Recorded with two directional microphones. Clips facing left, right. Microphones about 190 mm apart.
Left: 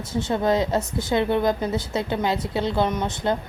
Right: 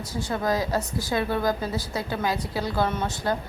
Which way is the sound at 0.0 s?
25° left (ahead or behind).